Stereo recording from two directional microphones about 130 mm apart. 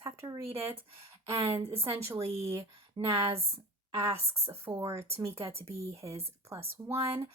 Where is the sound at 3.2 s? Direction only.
50° right (ahead or behind).